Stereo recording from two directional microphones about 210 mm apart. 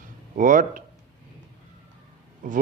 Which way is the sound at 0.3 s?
40° right (ahead or behind).